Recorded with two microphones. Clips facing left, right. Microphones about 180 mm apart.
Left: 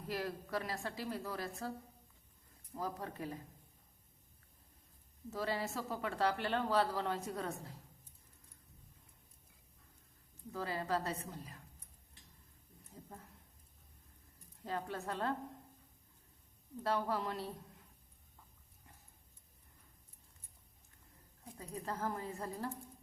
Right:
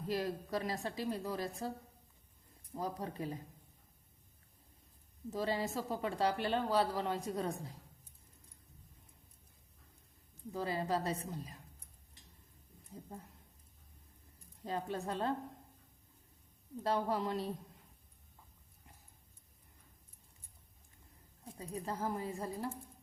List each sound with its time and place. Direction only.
0.1 s a woman's voice: 20° right (ahead or behind)
2.7 s a woman's voice: 20° right (ahead or behind)
5.3 s a woman's voice: 20° right (ahead or behind)
10.5 s a woman's voice: 20° right (ahead or behind)
14.6 s a woman's voice: 20° right (ahead or behind)
16.8 s a woman's voice: 15° right (ahead or behind)
21.4 s a woman's voice: 20° right (ahead or behind)